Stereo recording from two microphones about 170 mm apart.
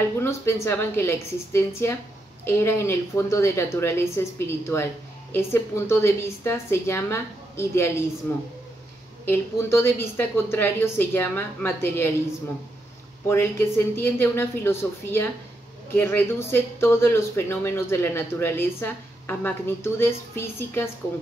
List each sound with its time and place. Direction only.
0.2 s speech: 15° left (ahead or behind)
13.3 s speech: 15° left (ahead or behind)